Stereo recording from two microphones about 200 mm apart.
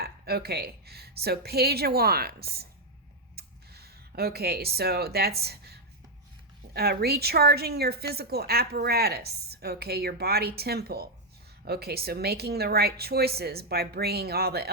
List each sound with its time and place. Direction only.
0.0 s a woman's voice: 50° right (ahead or behind)
3.3 s a sound: 50° right (ahead or behind)
6.7 s a woman's voice: 50° right (ahead or behind)